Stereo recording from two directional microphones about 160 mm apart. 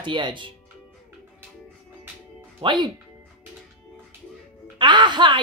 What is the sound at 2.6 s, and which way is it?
Speech, 30° right (ahead or behind).